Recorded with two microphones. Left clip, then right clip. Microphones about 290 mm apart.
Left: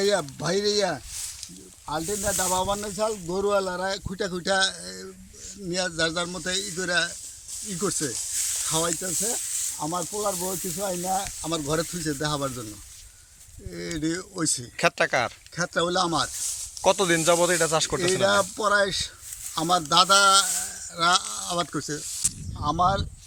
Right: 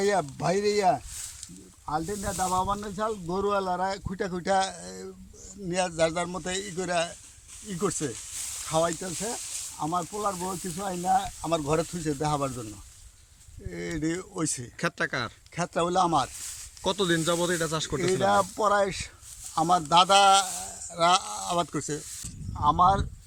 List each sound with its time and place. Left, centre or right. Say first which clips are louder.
0.0 s speech: left 1 dB; centre
2.5 s speech: left 2 dB; centre
13.7 s speech: left 2 dB; centre